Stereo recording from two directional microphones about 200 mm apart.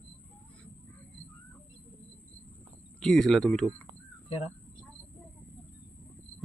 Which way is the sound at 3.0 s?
Centre (ahead or behind).